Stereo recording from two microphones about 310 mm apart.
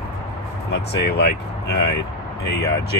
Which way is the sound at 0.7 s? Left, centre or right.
Left.